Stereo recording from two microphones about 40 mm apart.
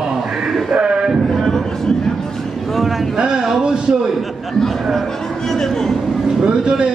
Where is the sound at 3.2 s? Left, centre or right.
Right.